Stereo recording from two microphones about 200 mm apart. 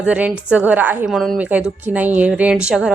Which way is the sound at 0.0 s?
5° right (ahead or behind).